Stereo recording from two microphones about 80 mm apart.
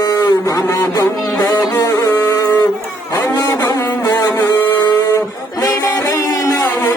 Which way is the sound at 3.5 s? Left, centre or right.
Left.